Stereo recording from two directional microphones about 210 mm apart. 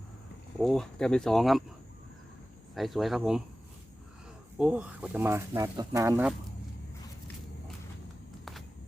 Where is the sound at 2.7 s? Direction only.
Centre (ahead or behind).